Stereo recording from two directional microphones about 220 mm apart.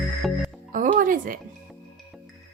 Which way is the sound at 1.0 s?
40° right (ahead or behind).